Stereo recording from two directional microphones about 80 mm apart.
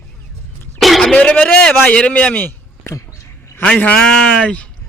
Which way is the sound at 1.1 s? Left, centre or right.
Centre.